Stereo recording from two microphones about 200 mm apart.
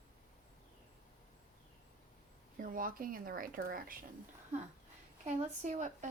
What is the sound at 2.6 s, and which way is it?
Speech, 45° right (ahead or behind).